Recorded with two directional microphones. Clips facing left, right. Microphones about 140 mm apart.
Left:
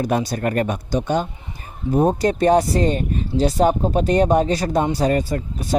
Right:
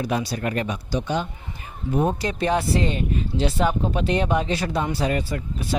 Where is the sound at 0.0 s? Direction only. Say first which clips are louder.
Left 4 dB; 45° left (ahead or behind).